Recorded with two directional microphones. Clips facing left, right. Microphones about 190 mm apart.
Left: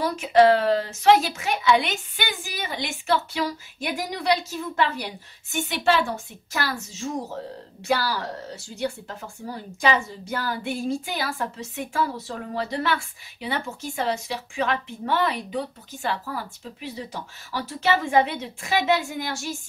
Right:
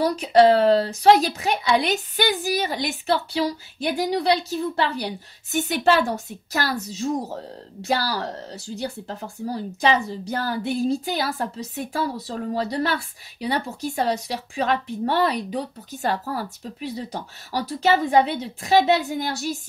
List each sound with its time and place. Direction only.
0.0 s a woman's voice: 35° right (ahead or behind)